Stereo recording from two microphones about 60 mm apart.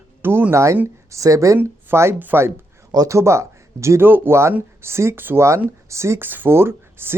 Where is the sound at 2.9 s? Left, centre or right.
Right.